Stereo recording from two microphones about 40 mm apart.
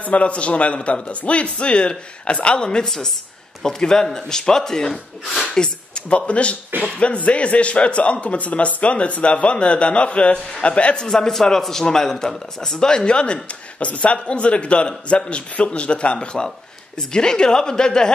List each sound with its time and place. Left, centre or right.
0.0 s a man's voice: left; by 5.0 s centre
5.5 s a man's voice: left
11.1 s a man's voice: centre